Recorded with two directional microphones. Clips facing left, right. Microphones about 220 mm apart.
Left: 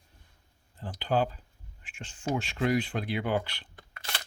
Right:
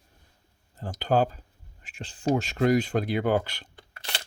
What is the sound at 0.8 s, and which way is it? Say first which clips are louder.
Speech: right 4 dB; 45° right (ahead or behind).